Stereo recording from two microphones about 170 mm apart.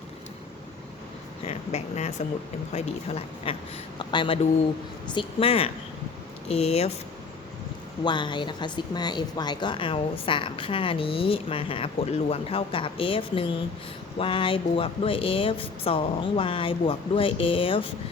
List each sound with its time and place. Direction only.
1.5 s a woman's voice: 40° left (ahead or behind)
8.0 s a woman's voice: 25° left (ahead or behind)